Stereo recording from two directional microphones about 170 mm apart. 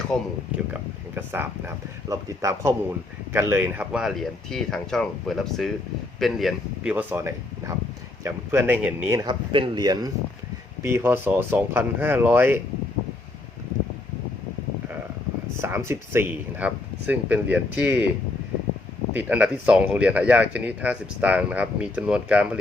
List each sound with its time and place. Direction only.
0.1 s speech: 5° left (ahead or behind)
0.7 s speech: 10° right (ahead or behind)
6.9 s speech: 15° right (ahead or behind)
9.2 s speech: 30° right (ahead or behind)
10.8 s speech: 15° right (ahead or behind)
15.6 s speech: 15° right (ahead or behind)
19.1 s speech: 10° right (ahead or behind)